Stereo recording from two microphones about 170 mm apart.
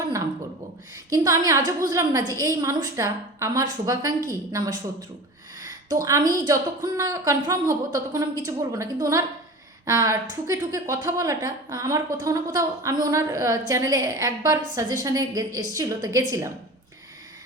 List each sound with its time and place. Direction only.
1.1 s a woman's voice: 20° right (ahead or behind)
5.6 s a sound: 20° right (ahead or behind)
6.4 s a woman's voice: 20° right (ahead or behind)